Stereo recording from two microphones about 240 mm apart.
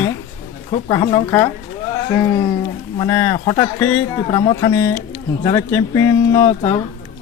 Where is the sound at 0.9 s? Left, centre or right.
Centre.